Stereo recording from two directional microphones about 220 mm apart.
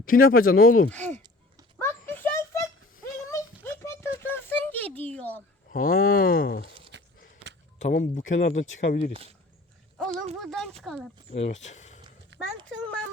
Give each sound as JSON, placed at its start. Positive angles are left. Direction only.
{"t": 0.0, "sound": "speech", "side_deg": 40}
{"t": 0.9, "sound": "speech", "side_deg": 5}
{"t": 1.8, "sound": "a sound", "side_deg": 10}
{"t": 5.7, "sound": "speech", "side_deg": 40}
{"t": 6.9, "sound": "walk", "side_deg": -55}
{"t": 7.8, "sound": "speech", "side_deg": 35}
{"t": 8.2, "sound": "speech", "side_deg": 60}
{"t": 8.9, "sound": "speech", "side_deg": 40}
{"t": 10.0, "sound": "a sound", "side_deg": 0}
{"t": 10.8, "sound": "speech", "side_deg": 0}
{"t": 11.5, "sound": "speech", "side_deg": 30}
{"t": 12.3, "sound": "clip-clop", "side_deg": -55}